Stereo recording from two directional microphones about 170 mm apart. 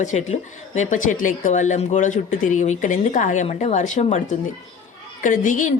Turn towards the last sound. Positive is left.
turn(degrees=50)  # may be behind; listen again after turning